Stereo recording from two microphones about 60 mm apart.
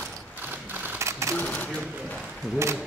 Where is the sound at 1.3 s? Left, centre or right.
Left.